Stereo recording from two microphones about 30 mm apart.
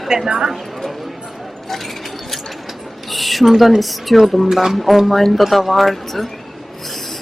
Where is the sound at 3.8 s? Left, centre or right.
Centre.